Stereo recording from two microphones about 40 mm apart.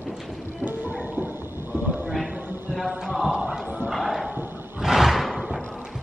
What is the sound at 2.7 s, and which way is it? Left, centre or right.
Music, centre.